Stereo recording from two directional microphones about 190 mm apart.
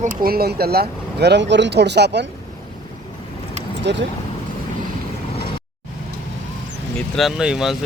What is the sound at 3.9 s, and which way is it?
Speech, 65° right (ahead or behind).